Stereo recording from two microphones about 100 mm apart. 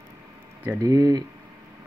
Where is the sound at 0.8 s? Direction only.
40° right (ahead or behind).